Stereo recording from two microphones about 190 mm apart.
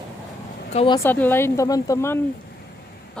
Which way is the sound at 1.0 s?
10° left (ahead or behind).